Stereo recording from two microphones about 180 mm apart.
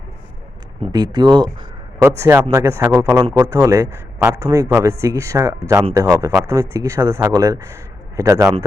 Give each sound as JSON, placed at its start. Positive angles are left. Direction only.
{"t": 0.9, "sound": "speech", "side_deg": -25}